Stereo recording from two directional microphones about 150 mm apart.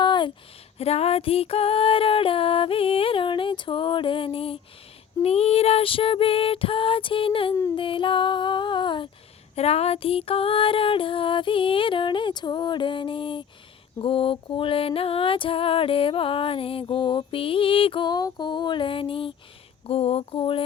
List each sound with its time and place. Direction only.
0.0 s a sound: 30° left (ahead or behind)
0.8 s music: 45° left (ahead or behind)
9.6 s music: 45° left (ahead or behind)